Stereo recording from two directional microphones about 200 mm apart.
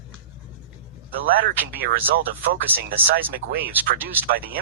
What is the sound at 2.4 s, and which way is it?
Speech, 50° right (ahead or behind).